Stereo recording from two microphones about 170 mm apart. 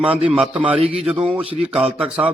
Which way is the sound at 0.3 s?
5° right (ahead or behind).